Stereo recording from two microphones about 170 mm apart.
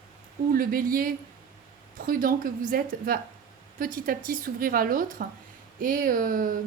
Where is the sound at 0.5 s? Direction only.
55° right (ahead or behind).